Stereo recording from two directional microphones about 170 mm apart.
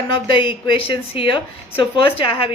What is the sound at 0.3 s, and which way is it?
A woman's voice, 30° left (ahead or behind).